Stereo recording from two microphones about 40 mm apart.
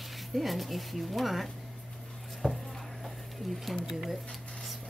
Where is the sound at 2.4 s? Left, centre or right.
Left.